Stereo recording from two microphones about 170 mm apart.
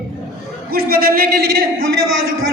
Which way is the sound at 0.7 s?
60° right (ahead or behind).